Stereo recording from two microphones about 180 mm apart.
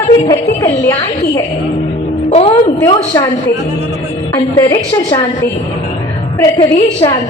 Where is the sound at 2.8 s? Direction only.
25° left (ahead or behind).